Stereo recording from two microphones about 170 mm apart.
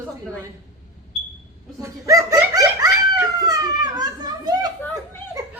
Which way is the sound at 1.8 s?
20° right (ahead or behind).